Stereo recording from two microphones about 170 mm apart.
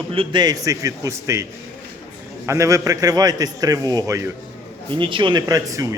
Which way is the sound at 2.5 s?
20° right (ahead or behind).